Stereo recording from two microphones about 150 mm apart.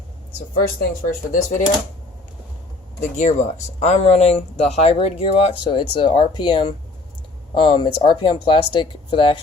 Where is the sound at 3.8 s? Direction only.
45° left (ahead or behind).